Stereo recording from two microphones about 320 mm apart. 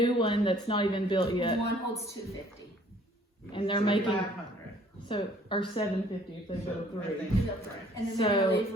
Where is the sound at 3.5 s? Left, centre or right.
Centre.